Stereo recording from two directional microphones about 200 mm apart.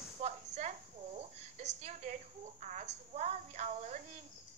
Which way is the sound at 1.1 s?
35° right (ahead or behind).